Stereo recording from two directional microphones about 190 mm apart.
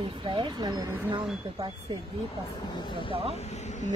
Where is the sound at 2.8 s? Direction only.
25° left (ahead or behind).